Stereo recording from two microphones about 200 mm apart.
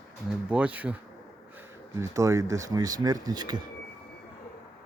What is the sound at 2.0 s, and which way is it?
Speech, 15° right (ahead or behind).